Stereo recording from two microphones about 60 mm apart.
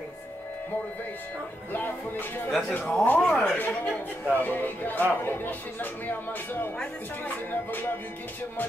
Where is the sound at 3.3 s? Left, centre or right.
Centre.